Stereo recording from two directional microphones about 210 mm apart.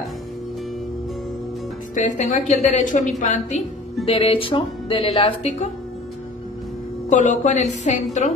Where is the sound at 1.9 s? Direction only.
35° left (ahead or behind).